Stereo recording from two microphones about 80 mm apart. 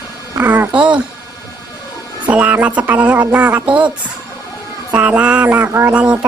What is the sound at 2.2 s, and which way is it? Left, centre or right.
Speech, centre.